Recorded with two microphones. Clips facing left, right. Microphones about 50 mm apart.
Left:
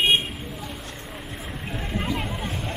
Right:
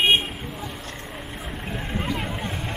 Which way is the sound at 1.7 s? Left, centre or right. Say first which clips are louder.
Even; centre.